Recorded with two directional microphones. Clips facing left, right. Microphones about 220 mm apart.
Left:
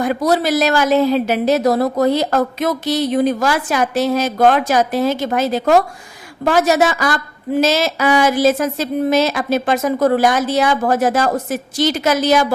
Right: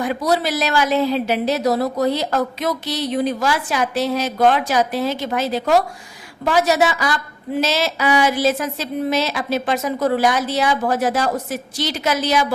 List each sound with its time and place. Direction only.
0.0 s a woman's voice: 45° left (ahead or behind)